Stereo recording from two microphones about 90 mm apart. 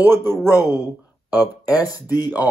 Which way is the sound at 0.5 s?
40° left (ahead or behind).